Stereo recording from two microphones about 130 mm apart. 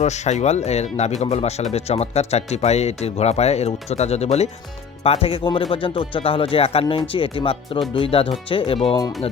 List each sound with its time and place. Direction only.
0.0 s speech: 60° left (ahead or behind)